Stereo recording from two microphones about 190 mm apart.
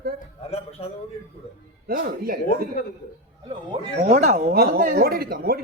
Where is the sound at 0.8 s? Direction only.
30° left (ahead or behind).